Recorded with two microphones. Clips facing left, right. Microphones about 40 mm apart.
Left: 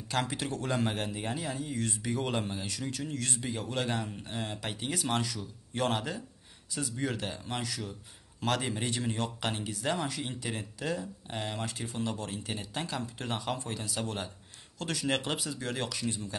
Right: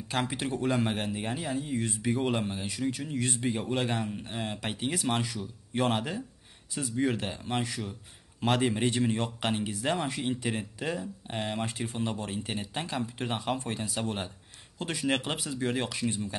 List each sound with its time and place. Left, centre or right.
0.1 s a man's voice: centre
4.9 s a man's voice: centre; by 16.2 s right